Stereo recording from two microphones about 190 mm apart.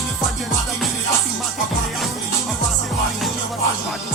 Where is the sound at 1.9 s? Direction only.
Centre (ahead or behind).